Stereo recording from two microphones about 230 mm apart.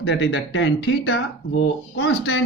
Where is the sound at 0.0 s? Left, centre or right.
Left.